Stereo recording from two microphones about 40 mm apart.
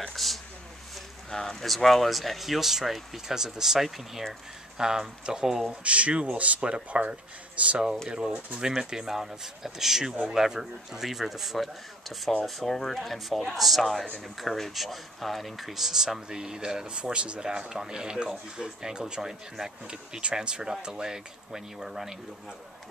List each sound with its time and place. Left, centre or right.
0.1 s speech: centre
4.7 s speech: centre
5.7 s speech: right
8.5 s speech: centre